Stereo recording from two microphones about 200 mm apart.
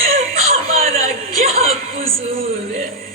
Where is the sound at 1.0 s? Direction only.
30° right (ahead or behind).